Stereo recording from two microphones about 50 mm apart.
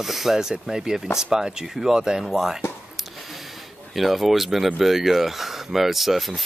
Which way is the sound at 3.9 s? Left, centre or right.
Centre.